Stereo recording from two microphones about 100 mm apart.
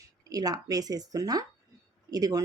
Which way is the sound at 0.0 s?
40° right (ahead or behind).